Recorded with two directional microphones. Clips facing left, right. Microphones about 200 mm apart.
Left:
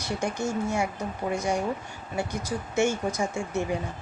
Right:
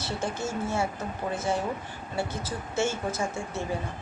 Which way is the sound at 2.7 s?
15° left (ahead or behind).